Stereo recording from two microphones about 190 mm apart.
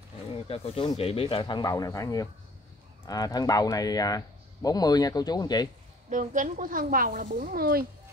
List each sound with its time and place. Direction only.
0.5 s speech: 30° left (ahead or behind)
6.0 s speech: 40° right (ahead or behind)